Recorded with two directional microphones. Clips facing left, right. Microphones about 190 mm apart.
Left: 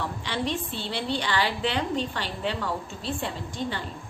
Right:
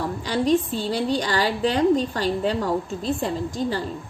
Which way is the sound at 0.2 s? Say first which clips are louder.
Right 12 dB; 40° right (ahead or behind).